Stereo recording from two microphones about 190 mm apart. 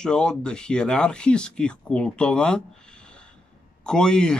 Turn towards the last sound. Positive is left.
turn(degrees=5)  # may be behind; listen again after turning